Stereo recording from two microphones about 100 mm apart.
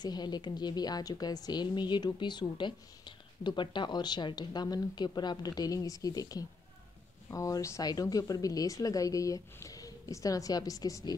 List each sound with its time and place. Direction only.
0.0 s a woman's voice: 45° left (ahead or behind)